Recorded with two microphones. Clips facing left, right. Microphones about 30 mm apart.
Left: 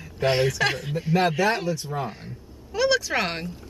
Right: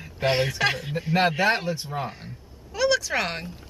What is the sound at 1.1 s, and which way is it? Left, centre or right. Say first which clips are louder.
Speech: even; right.